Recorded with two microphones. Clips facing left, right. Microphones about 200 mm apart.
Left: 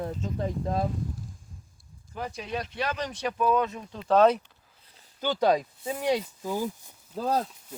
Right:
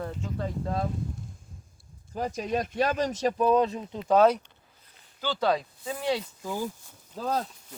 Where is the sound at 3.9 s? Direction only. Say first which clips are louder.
Left 2 dB; 15° right (ahead or behind).